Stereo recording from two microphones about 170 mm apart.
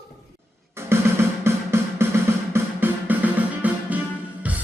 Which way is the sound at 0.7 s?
15° right (ahead or behind).